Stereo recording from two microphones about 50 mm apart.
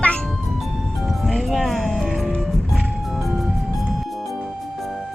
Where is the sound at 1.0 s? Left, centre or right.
Centre.